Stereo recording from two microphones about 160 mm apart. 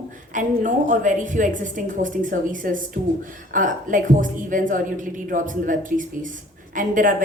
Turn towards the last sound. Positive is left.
turn(degrees=-55)  # may be behind; listen again after turning